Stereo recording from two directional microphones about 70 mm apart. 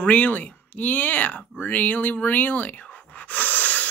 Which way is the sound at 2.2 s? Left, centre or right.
Left.